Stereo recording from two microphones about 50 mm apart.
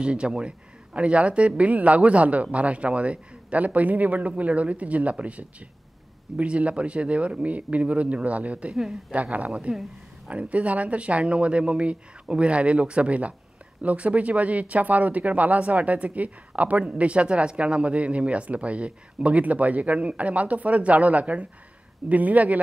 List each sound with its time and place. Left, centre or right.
0.0 s speech: centre